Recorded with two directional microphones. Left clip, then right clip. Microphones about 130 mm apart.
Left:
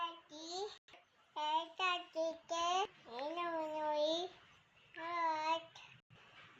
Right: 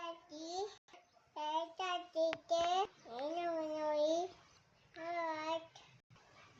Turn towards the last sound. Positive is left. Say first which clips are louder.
# left 3 dB
turn(degrees=-15)  # may be behind; listen again after turning